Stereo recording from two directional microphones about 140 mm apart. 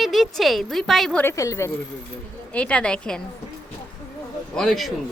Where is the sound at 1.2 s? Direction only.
20° left (ahead or behind).